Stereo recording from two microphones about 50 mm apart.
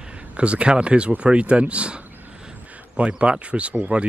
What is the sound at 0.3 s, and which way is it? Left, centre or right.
Speech, right.